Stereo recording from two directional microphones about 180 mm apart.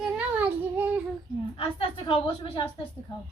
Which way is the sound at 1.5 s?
30° left (ahead or behind).